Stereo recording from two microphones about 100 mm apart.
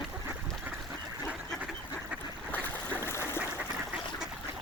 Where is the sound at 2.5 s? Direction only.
20° left (ahead or behind).